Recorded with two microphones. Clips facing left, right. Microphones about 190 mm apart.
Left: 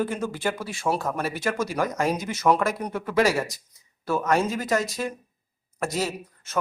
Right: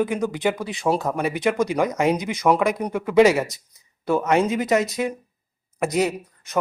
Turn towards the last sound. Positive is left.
turn(degrees=-15)  # may be behind; listen again after turning